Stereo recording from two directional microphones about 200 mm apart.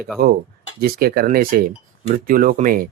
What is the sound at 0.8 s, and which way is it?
Speech, 50° right (ahead or behind).